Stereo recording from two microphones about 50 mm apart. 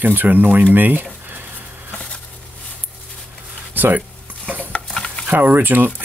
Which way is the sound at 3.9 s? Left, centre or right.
Right.